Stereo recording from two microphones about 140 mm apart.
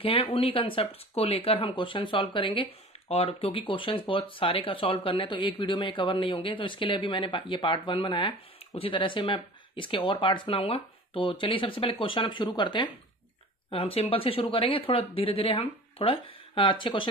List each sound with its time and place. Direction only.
0.0 s speech: 40° left (ahead or behind)